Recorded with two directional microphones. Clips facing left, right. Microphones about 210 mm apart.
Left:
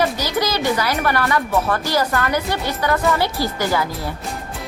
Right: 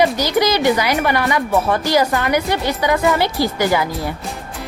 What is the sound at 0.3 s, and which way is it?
A woman's voice, 15° right (ahead or behind).